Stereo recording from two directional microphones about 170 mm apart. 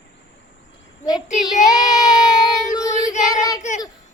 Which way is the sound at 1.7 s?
20° left (ahead or behind).